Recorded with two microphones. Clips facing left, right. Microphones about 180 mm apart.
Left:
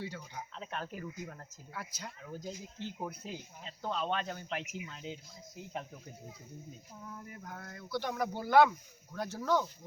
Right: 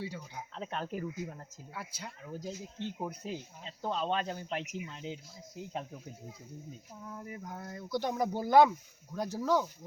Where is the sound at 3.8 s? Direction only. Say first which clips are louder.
Right 2 dB; 25° right (ahead or behind).